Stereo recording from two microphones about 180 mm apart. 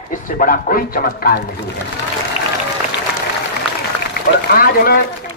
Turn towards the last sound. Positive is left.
turn(degrees=55)  # may be behind; listen again after turning